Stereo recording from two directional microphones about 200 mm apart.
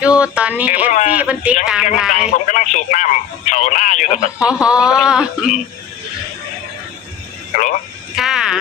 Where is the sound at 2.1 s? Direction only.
40° left (ahead or behind).